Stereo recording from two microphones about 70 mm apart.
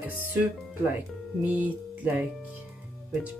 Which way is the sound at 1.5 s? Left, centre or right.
Right.